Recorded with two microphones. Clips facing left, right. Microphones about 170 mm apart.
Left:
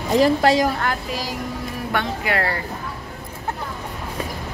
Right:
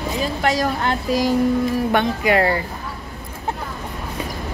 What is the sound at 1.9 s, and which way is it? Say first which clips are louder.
Speech: right 2 dB; 20° right (ahead or behind).